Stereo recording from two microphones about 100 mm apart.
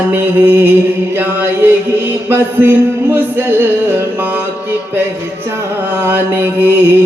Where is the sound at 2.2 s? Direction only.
20° right (ahead or behind).